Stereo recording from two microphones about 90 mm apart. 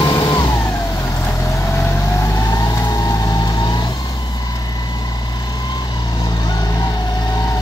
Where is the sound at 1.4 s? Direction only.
35° left (ahead or behind); by 3.9 s 50° left (ahead or behind).